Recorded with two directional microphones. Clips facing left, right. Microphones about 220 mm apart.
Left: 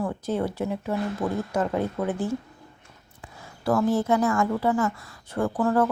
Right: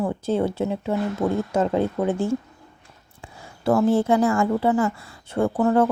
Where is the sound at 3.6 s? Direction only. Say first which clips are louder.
Right 4 dB; 25° right (ahead or behind).